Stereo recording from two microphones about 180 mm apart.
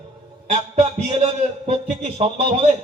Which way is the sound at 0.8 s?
35° right (ahead or behind).